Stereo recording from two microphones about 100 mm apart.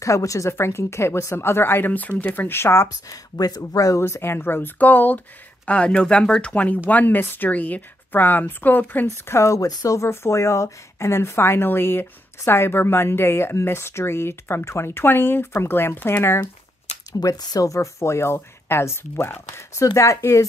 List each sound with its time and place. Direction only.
0.0 s speech: 35° left (ahead or behind)
4.0 s speech: 25° left (ahead or behind)
9.0 s speech: 30° left (ahead or behind)
17.2 s speech: 40° left (ahead or behind)